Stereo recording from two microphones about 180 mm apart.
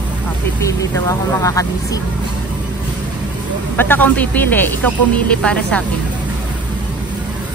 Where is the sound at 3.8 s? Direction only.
10° left (ahead or behind).